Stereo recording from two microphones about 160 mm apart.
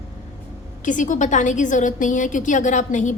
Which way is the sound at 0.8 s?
55° left (ahead or behind).